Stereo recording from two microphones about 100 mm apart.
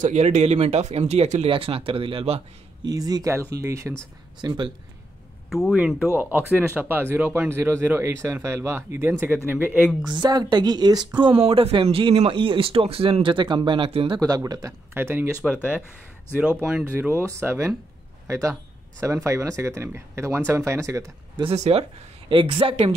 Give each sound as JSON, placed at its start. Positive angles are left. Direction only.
{"t": 0.2, "sound": "speech", "side_deg": -90}
{"t": 2.8, "sound": "speech", "side_deg": -40}
{"t": 3.3, "sound": "speech", "side_deg": -25}
{"t": 4.4, "sound": "speech", "side_deg": -50}
{"t": 5.5, "sound": "speech", "side_deg": -5}
{"t": 10.1, "sound": "speech", "side_deg": -45}
{"t": 11.1, "sound": "speech", "side_deg": -65}
{"t": 14.2, "sound": "speech", "side_deg": -35}
{"t": 15.0, "sound": "speech", "side_deg": -20}
{"t": 15.4, "sound": "speech", "side_deg": -5}
{"t": 16.3, "sound": "a man's voice", "side_deg": -15}
{"t": 21.4, "sound": "speech", "side_deg": -80}
{"t": 22.3, "sound": "speech", "side_deg": -60}